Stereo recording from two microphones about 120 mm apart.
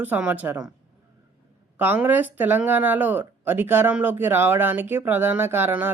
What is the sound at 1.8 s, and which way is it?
Speech, 15° right (ahead or behind).